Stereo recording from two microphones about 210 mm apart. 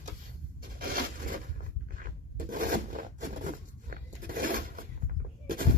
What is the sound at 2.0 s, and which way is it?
Filing, 40° right (ahead or behind).